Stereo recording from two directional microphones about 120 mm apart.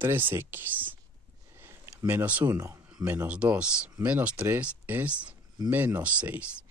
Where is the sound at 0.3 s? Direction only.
20° right (ahead or behind).